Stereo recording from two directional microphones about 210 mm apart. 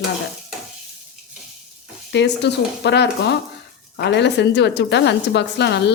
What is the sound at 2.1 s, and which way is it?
A woman's voice, 55° left (ahead or behind).